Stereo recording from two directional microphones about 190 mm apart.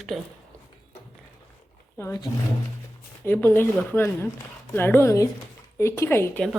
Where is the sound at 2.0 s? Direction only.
15° left (ahead or behind).